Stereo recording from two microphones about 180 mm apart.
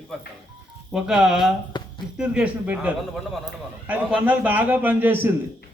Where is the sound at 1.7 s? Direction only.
25° left (ahead or behind).